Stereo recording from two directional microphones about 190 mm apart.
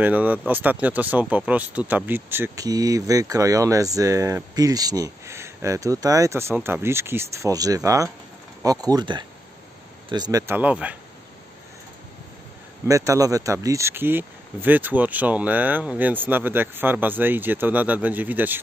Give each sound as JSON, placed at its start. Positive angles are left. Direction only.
{"t": 0.0, "sound": "speech", "side_deg": -10}
{"t": 12.8, "sound": "speech", "side_deg": -15}